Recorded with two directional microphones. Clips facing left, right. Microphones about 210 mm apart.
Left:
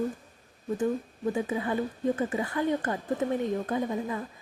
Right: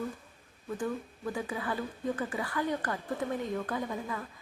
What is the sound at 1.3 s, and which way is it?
Speech, 20° left (ahead or behind).